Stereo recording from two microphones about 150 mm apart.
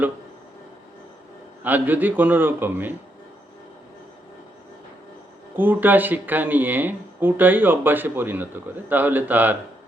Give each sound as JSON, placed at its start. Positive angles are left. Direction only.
{"t": 1.6, "sound": "speech", "side_deg": -10}
{"t": 5.5, "sound": "speech", "side_deg": -10}